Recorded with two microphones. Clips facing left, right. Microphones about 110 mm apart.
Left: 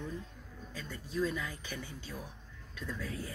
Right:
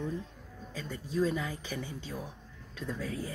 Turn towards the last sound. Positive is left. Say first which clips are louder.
# right 4 dB
turn(degrees=-30)  # may be behind; listen again after turning